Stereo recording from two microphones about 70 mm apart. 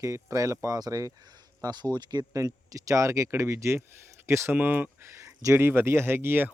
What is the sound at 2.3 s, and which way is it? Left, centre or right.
A man's voice, right.